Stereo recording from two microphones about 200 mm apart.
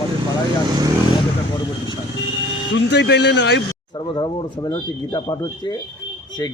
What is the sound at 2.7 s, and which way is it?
Speech, 60° left (ahead or behind).